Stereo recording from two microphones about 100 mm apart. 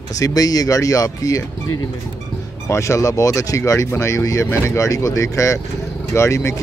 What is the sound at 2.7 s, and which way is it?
Speech, 30° left (ahead or behind).